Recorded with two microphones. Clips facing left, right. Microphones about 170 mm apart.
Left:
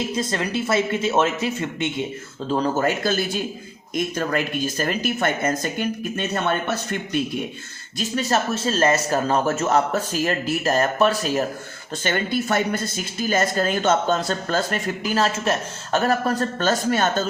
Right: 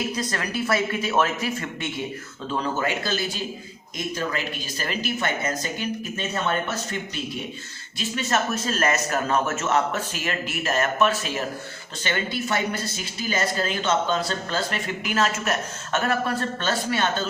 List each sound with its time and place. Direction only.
0.2 s speech: 25° left (ahead or behind)
2.5 s speech: 40° left (ahead or behind); by 6.2 s 55° left (ahead or behind)
7.9 s a man's voice: 35° left (ahead or behind)